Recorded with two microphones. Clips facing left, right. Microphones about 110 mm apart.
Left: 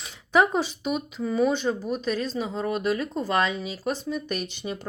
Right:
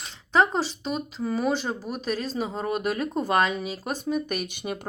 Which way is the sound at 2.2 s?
40° right (ahead or behind).